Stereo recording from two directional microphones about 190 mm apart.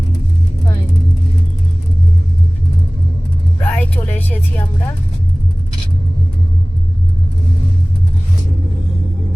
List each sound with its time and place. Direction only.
3.6 s vehicle: 10° left (ahead or behind)